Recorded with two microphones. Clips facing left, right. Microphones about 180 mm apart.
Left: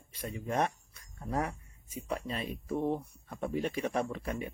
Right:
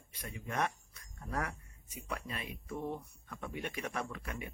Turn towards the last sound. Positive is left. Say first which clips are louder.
# left 7 dB
turn(degrees=30)  # may be behind; listen again after turning